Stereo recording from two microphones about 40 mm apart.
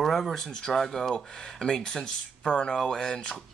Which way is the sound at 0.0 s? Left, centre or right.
Centre.